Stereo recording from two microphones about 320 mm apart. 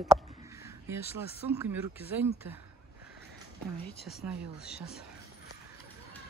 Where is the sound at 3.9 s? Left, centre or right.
Left.